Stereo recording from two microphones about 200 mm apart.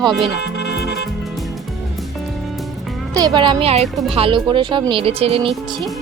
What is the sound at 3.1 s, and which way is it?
Speech, 20° right (ahead or behind).